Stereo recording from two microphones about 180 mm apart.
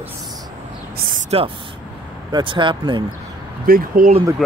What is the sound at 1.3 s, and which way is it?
Speech, 35° right (ahead or behind).